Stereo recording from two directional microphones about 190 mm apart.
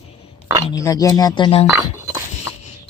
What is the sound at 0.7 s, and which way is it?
Speech, 20° left (ahead or behind).